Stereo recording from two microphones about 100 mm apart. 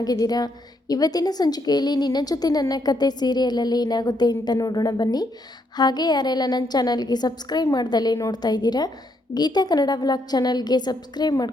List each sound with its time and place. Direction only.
0.0 s a woman's voice: 40° left (ahead or behind)